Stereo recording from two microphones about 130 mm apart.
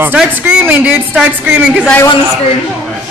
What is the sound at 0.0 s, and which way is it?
Speech, 10° right (ahead or behind).